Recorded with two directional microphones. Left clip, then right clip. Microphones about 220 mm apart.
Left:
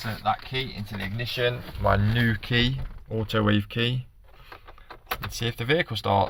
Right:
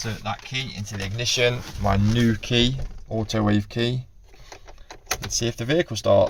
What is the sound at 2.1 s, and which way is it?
Speech, 20° left (ahead or behind).